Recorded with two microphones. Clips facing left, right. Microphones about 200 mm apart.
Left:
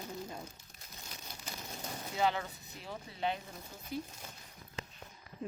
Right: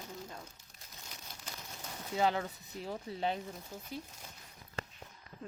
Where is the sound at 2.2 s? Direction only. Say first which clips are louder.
Right 1 dB; 35° right (ahead or behind).